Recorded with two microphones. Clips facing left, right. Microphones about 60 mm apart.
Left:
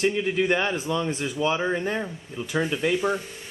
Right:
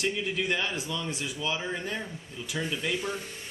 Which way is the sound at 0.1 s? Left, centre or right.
Left.